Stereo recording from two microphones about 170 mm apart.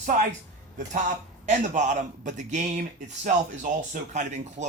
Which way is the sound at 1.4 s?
45° right (ahead or behind).